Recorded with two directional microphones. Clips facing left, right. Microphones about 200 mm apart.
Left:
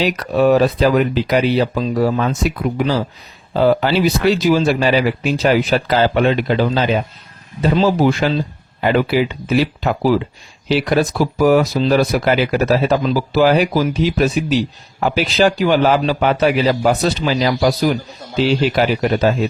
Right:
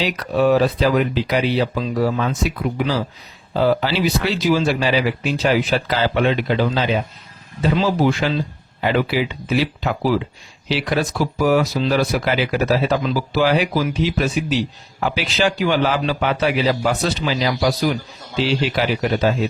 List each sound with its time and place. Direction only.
0.0 s speech: 50° left (ahead or behind)
3.5 s speech: 50° left (ahead or behind)